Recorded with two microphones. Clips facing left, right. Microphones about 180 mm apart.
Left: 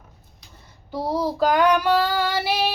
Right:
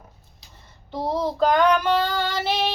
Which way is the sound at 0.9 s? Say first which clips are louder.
Even; 5° left (ahead or behind).